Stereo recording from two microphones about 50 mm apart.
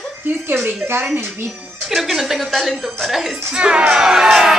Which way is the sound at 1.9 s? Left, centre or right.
Centre.